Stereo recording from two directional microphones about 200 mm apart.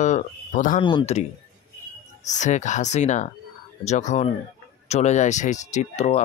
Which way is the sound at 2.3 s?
35° left (ahead or behind).